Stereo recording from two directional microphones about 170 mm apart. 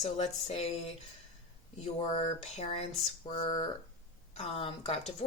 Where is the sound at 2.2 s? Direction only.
40° left (ahead or behind).